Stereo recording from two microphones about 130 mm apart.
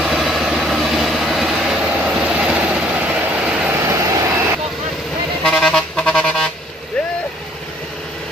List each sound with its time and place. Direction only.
0.0 s vehicle: centre (ahead or behind)
3.8 s vehicle: 20° right (ahead or behind)
5.4 s music: 5° left (ahead or behind)